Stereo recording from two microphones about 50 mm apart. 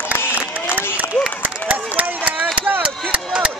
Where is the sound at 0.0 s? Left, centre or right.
Left.